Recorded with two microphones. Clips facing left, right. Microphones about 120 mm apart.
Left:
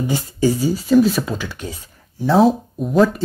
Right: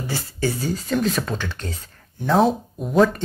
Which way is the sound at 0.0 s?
15° left (ahead or behind).